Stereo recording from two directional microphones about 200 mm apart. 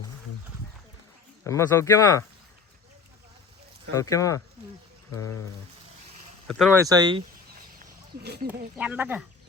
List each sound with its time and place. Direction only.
1.5 s speech: 15° left (ahead or behind)
3.9 s speech: 15° left (ahead or behind)
6.7 s speech: 20° right (ahead or behind)
7.5 s a sound: 50° right (ahead or behind)
8.7 s speech: 5° right (ahead or behind)